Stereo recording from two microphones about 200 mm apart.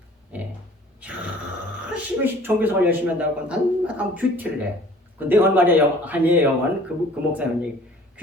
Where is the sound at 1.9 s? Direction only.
10° right (ahead or behind).